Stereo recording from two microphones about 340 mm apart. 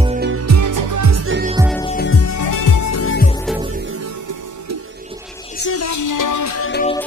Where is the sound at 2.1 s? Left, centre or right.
Left.